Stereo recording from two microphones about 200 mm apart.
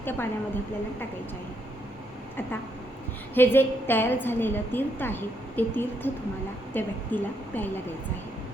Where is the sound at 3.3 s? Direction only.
10° left (ahead or behind).